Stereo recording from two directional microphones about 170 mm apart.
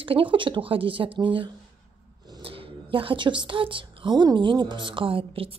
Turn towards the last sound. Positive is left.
turn(degrees=-30)  # may be behind; listen again after turning